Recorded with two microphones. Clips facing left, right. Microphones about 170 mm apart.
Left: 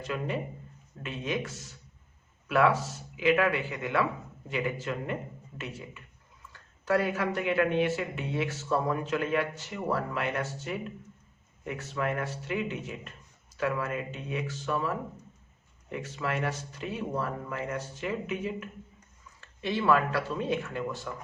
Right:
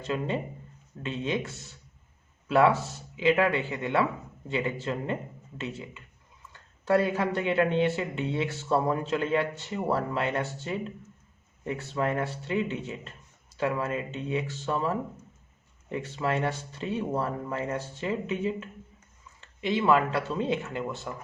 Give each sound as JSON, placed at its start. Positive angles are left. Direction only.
{"t": 0.0, "sound": "speech", "side_deg": -25}